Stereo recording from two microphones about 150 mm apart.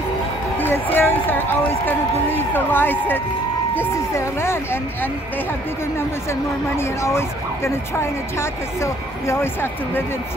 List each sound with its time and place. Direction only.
0.6 s a sound: 15° left (ahead or behind)
1.9 s speech: 15° left (ahead or behind)
6.8 s speech: 15° left (ahead or behind)